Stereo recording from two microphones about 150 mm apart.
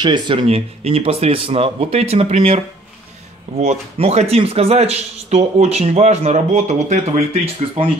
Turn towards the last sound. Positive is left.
turn(degrees=-40)  # may be behind; listen again after turning